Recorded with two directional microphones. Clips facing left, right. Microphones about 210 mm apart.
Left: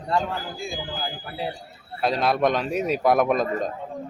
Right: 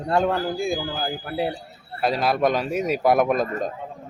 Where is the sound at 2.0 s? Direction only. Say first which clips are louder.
Right 1 dB; centre (ahead or behind).